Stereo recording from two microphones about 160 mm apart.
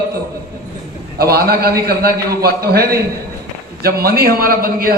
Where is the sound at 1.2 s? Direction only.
75° right (ahead or behind).